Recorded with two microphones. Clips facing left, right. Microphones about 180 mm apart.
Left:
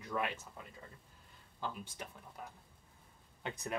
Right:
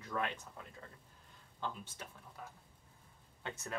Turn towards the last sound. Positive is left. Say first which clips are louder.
# left 3 dB
turn(degrees=15)  # may be behind; listen again after turning